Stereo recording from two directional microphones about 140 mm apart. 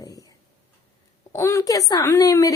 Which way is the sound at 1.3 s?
20° left (ahead or behind).